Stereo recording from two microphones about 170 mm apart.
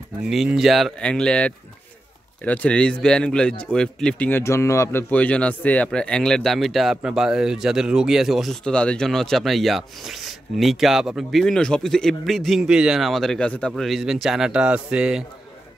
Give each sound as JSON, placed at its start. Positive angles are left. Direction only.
{"t": 0.3, "sound": "speech", "side_deg": 0}